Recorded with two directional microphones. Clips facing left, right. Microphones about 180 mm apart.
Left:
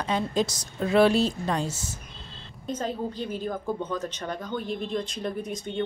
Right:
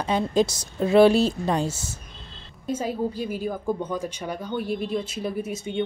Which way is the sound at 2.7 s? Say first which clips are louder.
Right 4 dB; 10° right (ahead or behind).